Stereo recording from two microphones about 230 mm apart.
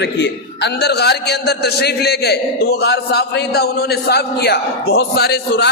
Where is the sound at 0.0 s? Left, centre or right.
Left.